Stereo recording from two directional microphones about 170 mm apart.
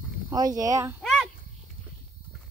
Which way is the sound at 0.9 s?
Centre (ahead or behind).